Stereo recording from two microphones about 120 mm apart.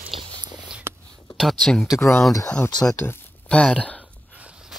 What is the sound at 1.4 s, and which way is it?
Speech, centre (ahead or behind).